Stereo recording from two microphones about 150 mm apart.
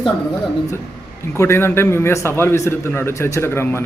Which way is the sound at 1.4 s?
15° left (ahead or behind).